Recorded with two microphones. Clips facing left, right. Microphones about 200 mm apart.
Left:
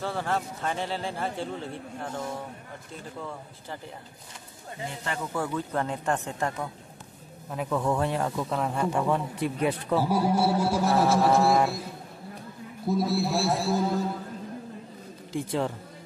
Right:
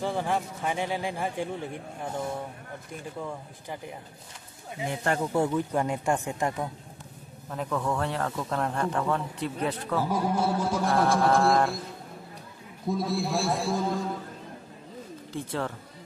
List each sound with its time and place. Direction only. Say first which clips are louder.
0.0 s speech: right 1 dB; 15° right (ahead or behind)
5.2 s speech: right 4 dB; 25° right (ahead or behind)
5.5 s speech: right 2 dB; 15° right (ahead or behind)
7.4 s speech: left 2 dB; 10° left (ahead or behind)
8.4 s speech: left 1 dB; 5° left (ahead or behind)
12.8 s a man's voice: left 2 dB; 5° left (ahead or behind)
15.3 s speech: left 4 dB; 15° left (ahead or behind)